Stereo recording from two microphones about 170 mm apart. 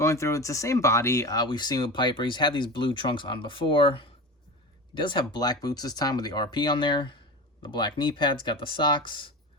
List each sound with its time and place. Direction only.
0.0 s speech: 15° left (ahead or behind)